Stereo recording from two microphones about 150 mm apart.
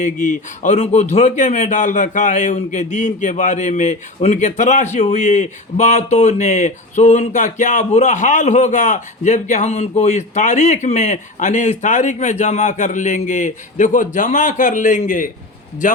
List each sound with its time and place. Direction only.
0.0 s a man's voice: 55° left (ahead or behind)